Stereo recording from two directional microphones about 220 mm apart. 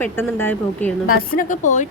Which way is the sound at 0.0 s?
10° left (ahead or behind).